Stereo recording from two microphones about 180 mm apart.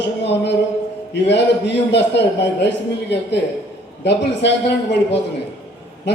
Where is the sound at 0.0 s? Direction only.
75° left (ahead or behind).